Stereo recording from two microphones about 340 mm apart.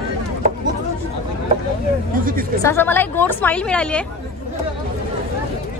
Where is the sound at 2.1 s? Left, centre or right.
Right.